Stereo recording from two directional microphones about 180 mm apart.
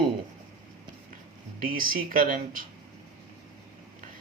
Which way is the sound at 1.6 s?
50° right (ahead or behind).